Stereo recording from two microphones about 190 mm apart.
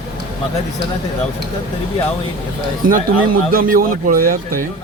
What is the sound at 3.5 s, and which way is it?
A man's voice, 50° right (ahead or behind).